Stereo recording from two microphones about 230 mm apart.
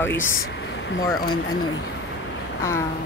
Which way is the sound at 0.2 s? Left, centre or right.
Left.